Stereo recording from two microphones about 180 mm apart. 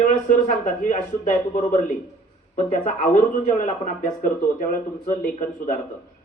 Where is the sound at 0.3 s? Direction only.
45° left (ahead or behind).